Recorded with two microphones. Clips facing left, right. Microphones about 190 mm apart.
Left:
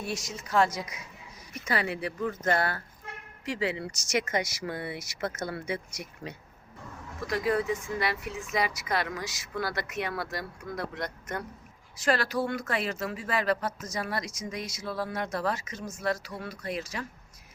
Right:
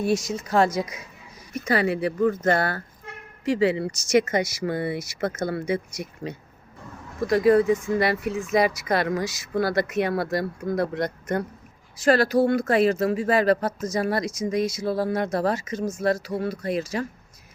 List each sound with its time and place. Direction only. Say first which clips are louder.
0.3 s speech: right 5 dB; 35° right (ahead or behind)
5.2 s speech: right 6 dB; 55° right (ahead or behind)
7.3 s speech: right 10 dB; 40° right (ahead or behind)